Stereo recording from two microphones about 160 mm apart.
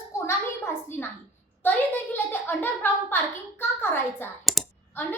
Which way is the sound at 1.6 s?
10° left (ahead or behind).